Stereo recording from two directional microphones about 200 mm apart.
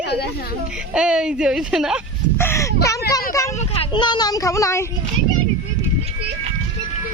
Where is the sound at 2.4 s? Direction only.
10° left (ahead or behind).